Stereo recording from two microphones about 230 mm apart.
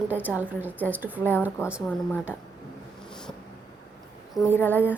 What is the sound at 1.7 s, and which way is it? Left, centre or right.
Speech, centre.